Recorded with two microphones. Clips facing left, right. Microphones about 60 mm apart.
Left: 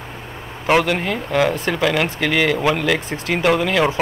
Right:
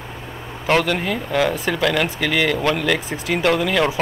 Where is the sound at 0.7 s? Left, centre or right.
Centre.